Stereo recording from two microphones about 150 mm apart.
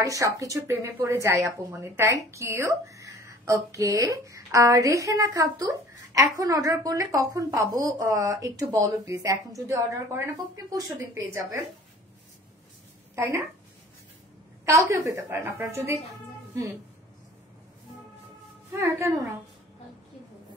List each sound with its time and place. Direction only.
0.0 s speech: 20° right (ahead or behind)
13.1 s a woman's voice: 15° right (ahead or behind)
14.9 s speech: 20° right (ahead or behind)
18.7 s speech: 20° right (ahead or behind)